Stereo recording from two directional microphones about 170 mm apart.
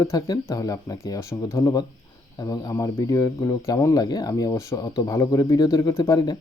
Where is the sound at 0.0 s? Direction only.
20° left (ahead or behind).